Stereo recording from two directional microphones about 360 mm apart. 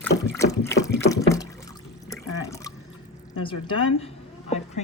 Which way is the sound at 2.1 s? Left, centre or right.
Centre.